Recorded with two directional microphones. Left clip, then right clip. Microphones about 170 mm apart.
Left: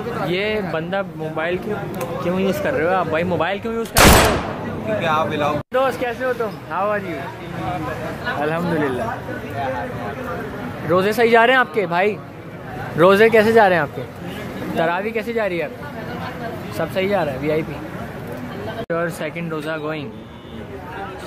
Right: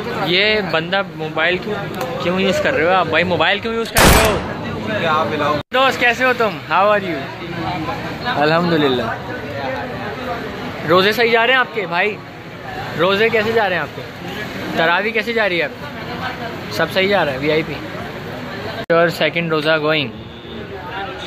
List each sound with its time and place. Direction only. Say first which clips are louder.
0.3 s speech: right 8 dB; centre (ahead or behind)
5.0 s speech: right 3 dB; 5° left (ahead or behind)
6.2 s speech: right 6 dB; 20° right (ahead or behind)
8.4 s speech: right 7 dB; 20° right (ahead or behind)
10.9 s speech: right 4 dB; 5° left (ahead or behind)
11.1 s speech: even; 25° left (ahead or behind)
13.0 s speech: left 3 dB; 35° left (ahead or behind)
14.8 s speech: right 5 dB; 5° left (ahead or behind)
16.7 s speech: right 5 dB; centre (ahead or behind)
18.9 s speech: right 10 dB; 20° right (ahead or behind)